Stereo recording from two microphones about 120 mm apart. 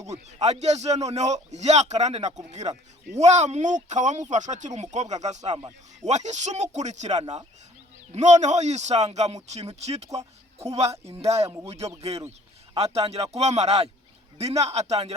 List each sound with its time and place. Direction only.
0.0 s a man's voice: 65° right (ahead or behind)
11.1 s speech: 55° right (ahead or behind)
11.4 s speech: 25° right (ahead or behind)
11.7 s speech: 60° right (ahead or behind)